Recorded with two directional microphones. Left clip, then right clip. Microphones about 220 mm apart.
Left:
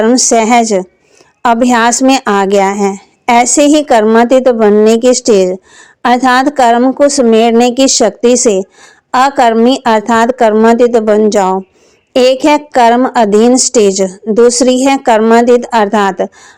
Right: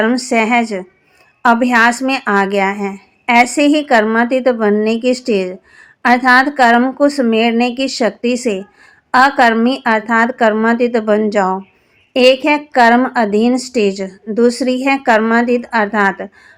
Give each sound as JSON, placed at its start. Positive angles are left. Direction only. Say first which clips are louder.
{"t": 0.0, "sound": "a woman's voice", "louder": "left 6 dB", "side_deg": 40}